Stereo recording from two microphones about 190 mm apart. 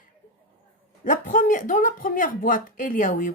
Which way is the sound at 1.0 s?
45° left (ahead or behind).